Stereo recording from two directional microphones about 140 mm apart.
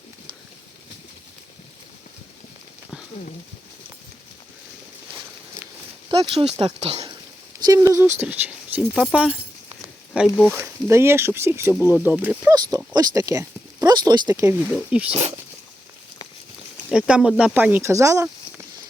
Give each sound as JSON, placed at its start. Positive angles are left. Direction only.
{"t": 6.1, "sound": "speech", "side_deg": -45}
{"t": 7.6, "sound": "speech", "side_deg": -25}
{"t": 10.6, "sound": "speech", "side_deg": -20}
{"t": 12.7, "sound": "speech", "side_deg": -25}
{"t": 14.7, "sound": "speech", "side_deg": -10}
{"t": 16.9, "sound": "speech", "side_deg": -5}